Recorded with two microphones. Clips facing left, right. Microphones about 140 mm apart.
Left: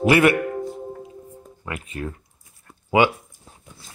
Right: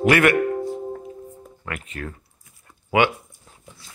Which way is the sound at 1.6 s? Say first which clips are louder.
Left 2 dB; 15° left (ahead or behind).